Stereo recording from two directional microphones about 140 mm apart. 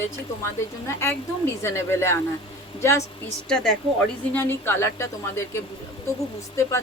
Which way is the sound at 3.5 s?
5° left (ahead or behind).